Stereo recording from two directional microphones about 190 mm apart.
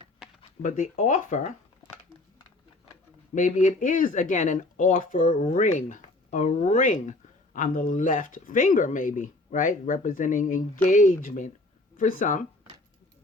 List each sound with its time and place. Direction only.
0.4 s speech: 45° left (ahead or behind)
3.3 s speech: 45° left (ahead or behind)